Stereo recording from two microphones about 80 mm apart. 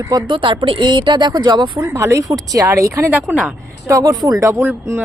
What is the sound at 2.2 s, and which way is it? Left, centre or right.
Speech, right.